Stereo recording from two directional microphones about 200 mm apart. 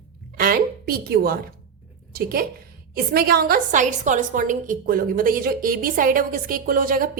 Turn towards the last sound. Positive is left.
turn(degrees=-45)  # may be behind; listen again after turning